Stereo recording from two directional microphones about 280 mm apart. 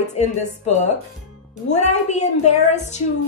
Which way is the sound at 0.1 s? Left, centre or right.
Left.